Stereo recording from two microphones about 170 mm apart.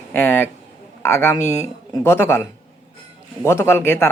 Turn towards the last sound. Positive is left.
turn(degrees=15)  # may be behind; listen again after turning